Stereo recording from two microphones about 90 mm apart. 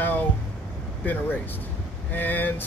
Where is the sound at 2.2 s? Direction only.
20° left (ahead or behind).